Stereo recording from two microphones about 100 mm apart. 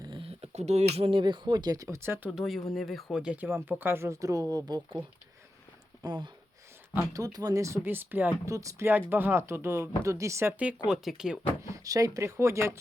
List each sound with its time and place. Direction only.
0.1 s a sound: 75° right (ahead or behind)
1.2 s speech: 45° right (ahead or behind); by 2.3 s 25° right (ahead or behind)
2.3 s speech: centre (ahead or behind); by 4.8 s 35° right (ahead or behind)
6.0 s speech: 45° right (ahead or behind); by 8.4 s 20° right (ahead or behind)
8.4 s speech: 30° right (ahead or behind)
8.9 s speech: 20° right (ahead or behind)
10.8 s speech: 5° right (ahead or behind)
11.6 s speech: 35° right (ahead or behind)